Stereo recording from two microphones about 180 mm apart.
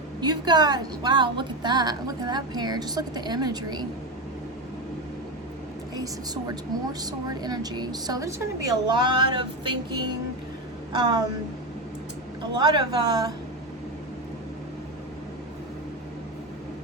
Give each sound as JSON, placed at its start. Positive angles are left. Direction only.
{"t": 0.2, "sound": "a woman's voice", "side_deg": -25}
{"t": 5.9, "sound": "a woman's voice", "side_deg": -20}
{"t": 12.5, "sound": "a woman's voice", "side_deg": -25}